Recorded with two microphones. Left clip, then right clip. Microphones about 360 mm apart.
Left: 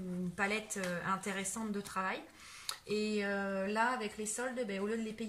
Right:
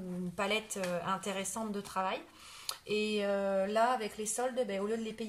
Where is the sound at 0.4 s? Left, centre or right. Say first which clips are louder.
Right 2 dB; centre.